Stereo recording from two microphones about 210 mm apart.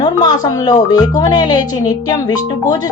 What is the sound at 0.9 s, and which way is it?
Speech, 20° left (ahead or behind).